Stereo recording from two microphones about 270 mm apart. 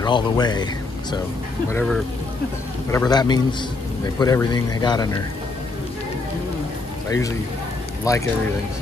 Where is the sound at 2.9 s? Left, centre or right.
Centre.